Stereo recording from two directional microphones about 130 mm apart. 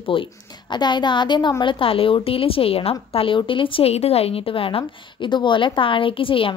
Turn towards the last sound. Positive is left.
turn(degrees=45)  # may be behind; listen again after turning